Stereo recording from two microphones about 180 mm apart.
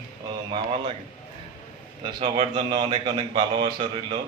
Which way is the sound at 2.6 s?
25° right (ahead or behind).